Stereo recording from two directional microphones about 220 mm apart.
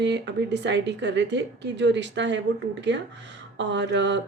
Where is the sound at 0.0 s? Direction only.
50° right (ahead or behind).